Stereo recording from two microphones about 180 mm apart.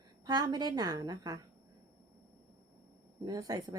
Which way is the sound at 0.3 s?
20° right (ahead or behind).